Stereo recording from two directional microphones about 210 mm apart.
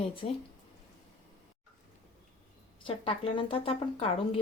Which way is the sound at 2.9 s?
25° left (ahead or behind).